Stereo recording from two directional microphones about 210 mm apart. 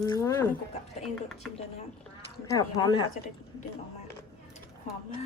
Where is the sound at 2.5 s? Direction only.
15° left (ahead or behind).